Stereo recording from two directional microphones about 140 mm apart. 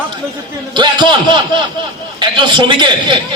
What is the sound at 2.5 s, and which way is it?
Speech, 35° right (ahead or behind).